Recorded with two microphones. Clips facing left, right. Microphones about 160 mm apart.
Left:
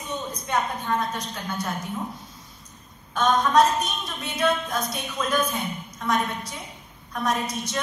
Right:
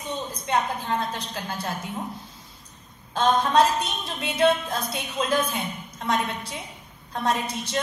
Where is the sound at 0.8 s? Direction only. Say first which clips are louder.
Left 1 dB; 25° right (ahead or behind).